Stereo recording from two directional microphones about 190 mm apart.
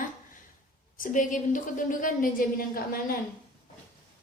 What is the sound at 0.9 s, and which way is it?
A woman's voice, 45° left (ahead or behind).